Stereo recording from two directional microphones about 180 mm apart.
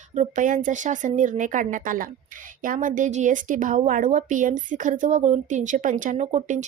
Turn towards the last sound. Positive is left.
turn(degrees=-40)  # may be behind; listen again after turning